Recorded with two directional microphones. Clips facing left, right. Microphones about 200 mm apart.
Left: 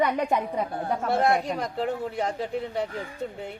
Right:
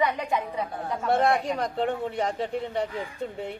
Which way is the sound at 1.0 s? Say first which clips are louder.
Right 1 dB; centre (ahead or behind).